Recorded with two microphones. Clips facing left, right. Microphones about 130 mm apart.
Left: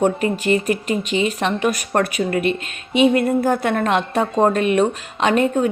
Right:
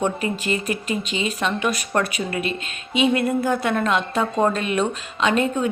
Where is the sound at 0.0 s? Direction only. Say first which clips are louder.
Left 5 dB; 45° left (ahead or behind).